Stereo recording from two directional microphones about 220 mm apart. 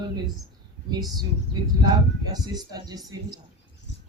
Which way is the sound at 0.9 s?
20° right (ahead or behind).